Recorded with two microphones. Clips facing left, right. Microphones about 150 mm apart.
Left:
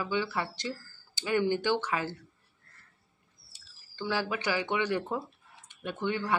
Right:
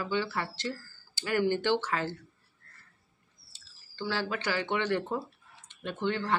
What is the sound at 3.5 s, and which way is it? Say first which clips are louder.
Speech: even; 15° left (ahead or behind).